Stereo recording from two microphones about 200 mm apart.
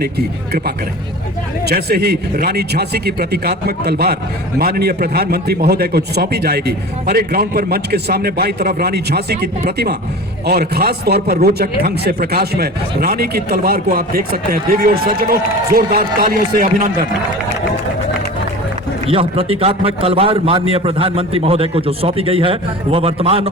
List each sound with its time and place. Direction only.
1.6 s speech: 50° right (ahead or behind)
19.0 s a man's voice: 30° right (ahead or behind)